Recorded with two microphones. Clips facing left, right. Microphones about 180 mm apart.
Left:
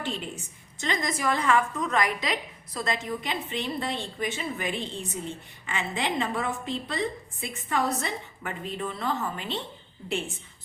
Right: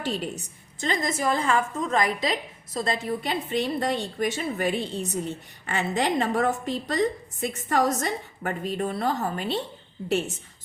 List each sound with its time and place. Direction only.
0.0 s a woman's voice: 40° right (ahead or behind)